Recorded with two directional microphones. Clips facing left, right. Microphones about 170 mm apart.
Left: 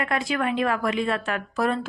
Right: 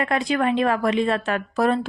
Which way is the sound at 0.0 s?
25° right (ahead or behind).